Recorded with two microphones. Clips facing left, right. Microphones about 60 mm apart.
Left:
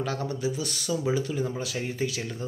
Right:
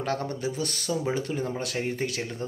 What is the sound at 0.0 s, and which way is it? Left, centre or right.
Speech, right.